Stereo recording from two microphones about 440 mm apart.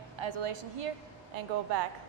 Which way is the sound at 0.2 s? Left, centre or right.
Right.